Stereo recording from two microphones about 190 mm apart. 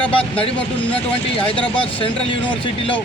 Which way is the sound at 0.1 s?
30° left (ahead or behind).